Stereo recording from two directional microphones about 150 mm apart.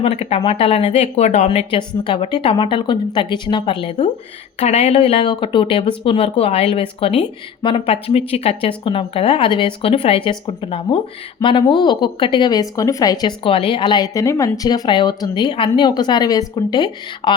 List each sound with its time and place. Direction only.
0.0 s speech: 40° left (ahead or behind)
1.5 s speech: 35° left (ahead or behind)